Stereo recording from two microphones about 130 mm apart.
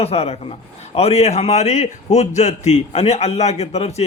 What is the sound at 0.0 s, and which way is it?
A man's voice, 50° left (ahead or behind).